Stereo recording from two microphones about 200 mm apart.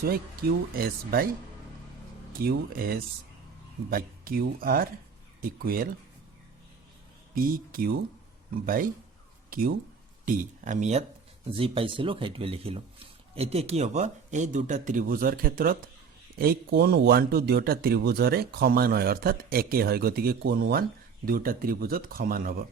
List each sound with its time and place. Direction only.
0.7 s speech: 45° right (ahead or behind)
2.4 s speech: 50° right (ahead or behind)
7.3 s speech: 45° right (ahead or behind)